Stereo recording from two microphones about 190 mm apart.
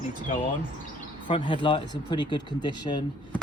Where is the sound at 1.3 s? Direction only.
25° left (ahead or behind).